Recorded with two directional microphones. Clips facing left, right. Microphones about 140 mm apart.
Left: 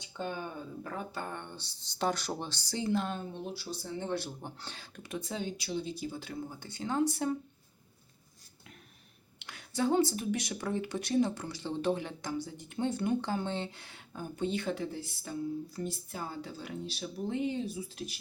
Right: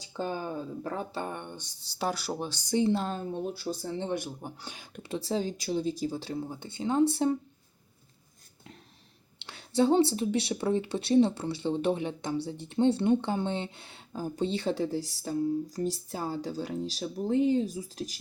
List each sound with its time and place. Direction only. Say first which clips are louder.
0.0 s speech: right 4 dB; 35° right (ahead or behind)
2.9 s speech: right 2 dB; 30° right (ahead or behind)
3.3 s speech: right 7 dB; 45° right (ahead or behind)
3.8 s speech: right 2 dB; 30° right (ahead or behind)
4.1 s speech: right 2 dB; 15° right (ahead or behind)
5.0 s speech: right 6 dB; 30° right (ahead or behind)
9.4 s a sound: right 6 dB; 30° right (ahead or behind)
10.2 s speech: right 5 dB; 25° right (ahead or behind)